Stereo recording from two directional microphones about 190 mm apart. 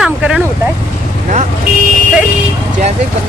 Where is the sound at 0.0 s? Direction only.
5° right (ahead or behind).